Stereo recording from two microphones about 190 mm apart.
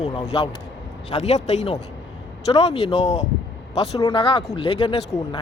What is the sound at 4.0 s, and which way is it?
A woman's voice, 25° left (ahead or behind).